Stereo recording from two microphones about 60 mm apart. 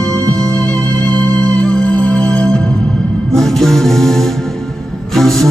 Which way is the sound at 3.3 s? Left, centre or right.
Centre.